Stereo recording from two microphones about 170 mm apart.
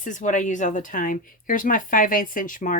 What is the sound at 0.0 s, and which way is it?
Speech, 45° left (ahead or behind).